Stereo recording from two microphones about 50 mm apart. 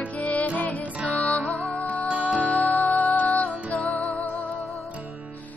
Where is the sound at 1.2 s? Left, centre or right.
Centre.